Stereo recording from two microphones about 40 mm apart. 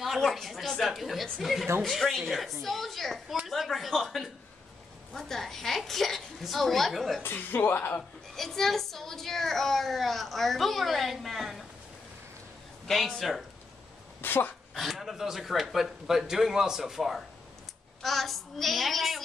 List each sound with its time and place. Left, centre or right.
0.2 s a woman's voice: centre
7.3 s speech: left
8.4 s a woman's voice: centre
12.8 s speech: centre
14.2 s speech: left
14.7 s a woman's voice: centre